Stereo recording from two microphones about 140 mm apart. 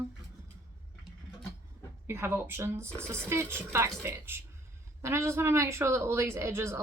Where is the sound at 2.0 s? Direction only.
15° right (ahead or behind).